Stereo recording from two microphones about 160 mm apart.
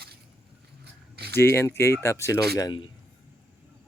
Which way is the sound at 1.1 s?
85° right.